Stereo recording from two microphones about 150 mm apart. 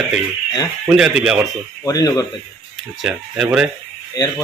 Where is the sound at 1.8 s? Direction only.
25° left (ahead or behind).